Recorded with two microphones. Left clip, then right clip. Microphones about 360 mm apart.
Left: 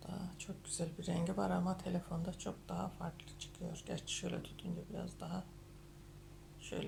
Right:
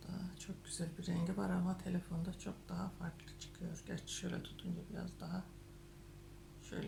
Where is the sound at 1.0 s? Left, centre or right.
Centre.